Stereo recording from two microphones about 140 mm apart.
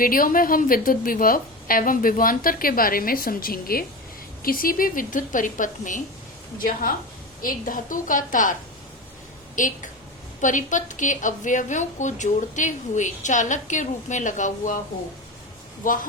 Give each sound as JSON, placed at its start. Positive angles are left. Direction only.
{"t": 0.0, "sound": "a woman's voice", "side_deg": 90}
{"t": 6.6, "sound": "a woman's voice", "side_deg": 80}
{"t": 9.6, "sound": "a woman's voice", "side_deg": 70}
{"t": 15.8, "sound": "a woman's voice", "side_deg": 80}